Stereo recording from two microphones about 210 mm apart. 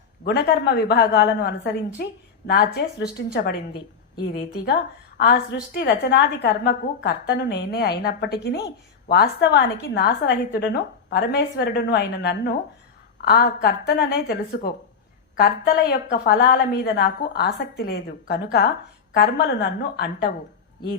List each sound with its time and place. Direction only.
0.3 s a woman's voice: 50° left (ahead or behind)